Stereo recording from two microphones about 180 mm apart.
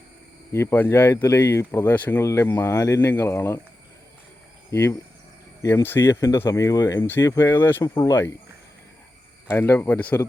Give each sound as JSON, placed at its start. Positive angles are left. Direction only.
{"t": 0.5, "sound": "speech", "side_deg": 15}
{"t": 4.7, "sound": "speech", "side_deg": 15}
{"t": 9.5, "sound": "speech", "side_deg": 15}